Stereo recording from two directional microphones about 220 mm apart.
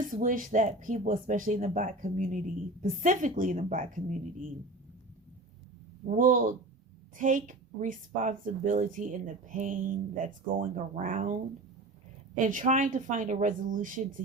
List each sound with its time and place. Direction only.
0.0 s a woman's voice: 35° right (ahead or behind)
6.1 s a woman's voice: 35° right (ahead or behind)
12.4 s a woman's voice: 35° right (ahead or behind)